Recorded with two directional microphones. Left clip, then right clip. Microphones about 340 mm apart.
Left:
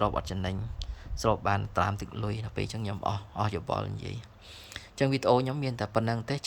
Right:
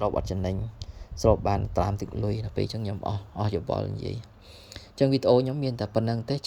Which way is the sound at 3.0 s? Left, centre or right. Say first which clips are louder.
Left 3 dB; centre.